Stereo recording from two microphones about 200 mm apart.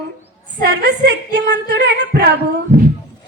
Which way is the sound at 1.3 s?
60° right (ahead or behind).